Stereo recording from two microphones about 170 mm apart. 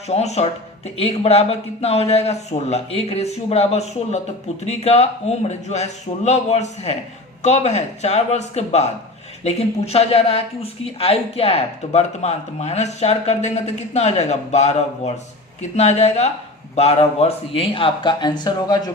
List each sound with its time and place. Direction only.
0.1 s speech: 40° left (ahead or behind); by 18.9 s 25° left (ahead or behind)